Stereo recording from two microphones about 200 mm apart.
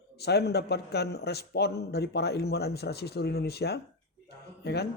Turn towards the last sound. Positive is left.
turn(degrees=55)  # may be behind; listen again after turning